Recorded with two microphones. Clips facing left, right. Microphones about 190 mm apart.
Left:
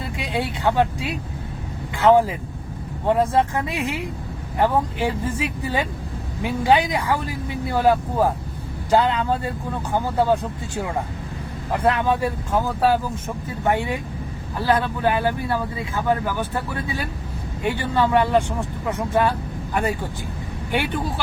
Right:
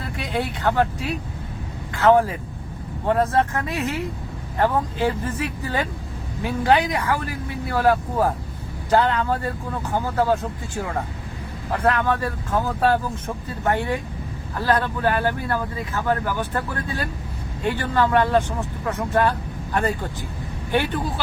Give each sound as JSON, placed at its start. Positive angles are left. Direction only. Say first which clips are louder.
{"t": 0.2, "sound": "speech", "louder": "even", "side_deg": 15}
{"t": 11.7, "sound": "speech", "louder": "left 1 dB", "side_deg": 15}